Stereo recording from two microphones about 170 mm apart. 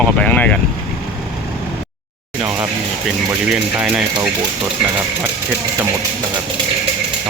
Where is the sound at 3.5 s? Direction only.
Centre (ahead or behind).